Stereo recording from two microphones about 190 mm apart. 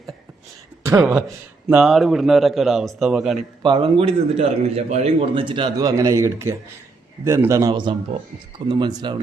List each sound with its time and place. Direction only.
0.8 s a sound: 15° right (ahead or behind)
1.7 s a man's voice: centre (ahead or behind)
3.6 s a man's voice: 25° right (ahead or behind)